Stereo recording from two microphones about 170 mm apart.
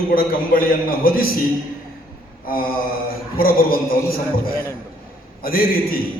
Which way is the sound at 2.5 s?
60° left (ahead or behind).